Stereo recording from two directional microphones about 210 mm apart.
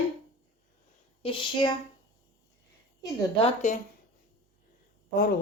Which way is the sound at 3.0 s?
25° left (ahead or behind).